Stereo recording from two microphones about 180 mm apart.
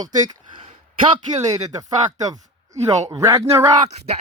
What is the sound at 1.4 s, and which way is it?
Speech, 20° right (ahead or behind).